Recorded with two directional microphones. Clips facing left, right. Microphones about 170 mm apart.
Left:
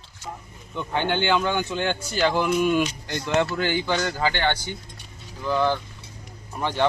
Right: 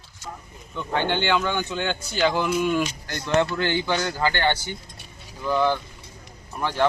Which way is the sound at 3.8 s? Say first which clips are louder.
Even; 10° right (ahead or behind).